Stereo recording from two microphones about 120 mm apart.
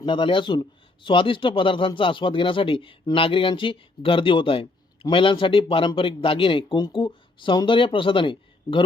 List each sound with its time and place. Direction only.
0.0 s speech: 40° left (ahead or behind)